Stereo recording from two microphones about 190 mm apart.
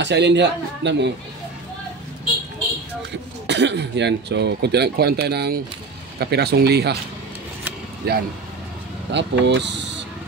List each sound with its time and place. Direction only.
0.0 s speech: 65° right (ahead or behind)
3.4 s speech: 65° right (ahead or behind)
8.0 s speech: 55° right (ahead or behind)
9.1 s speech: 65° right (ahead or behind)